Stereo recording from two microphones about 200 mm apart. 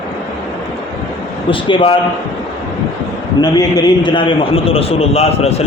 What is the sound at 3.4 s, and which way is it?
A man's voice, 20° left (ahead or behind).